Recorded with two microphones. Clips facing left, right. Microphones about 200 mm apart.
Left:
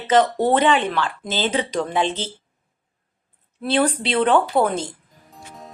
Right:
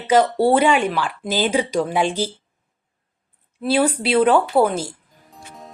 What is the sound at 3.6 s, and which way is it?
Speech, 10° right (ahead or behind).